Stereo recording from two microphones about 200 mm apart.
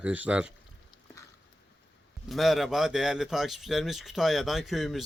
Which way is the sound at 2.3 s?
Centre (ahead or behind).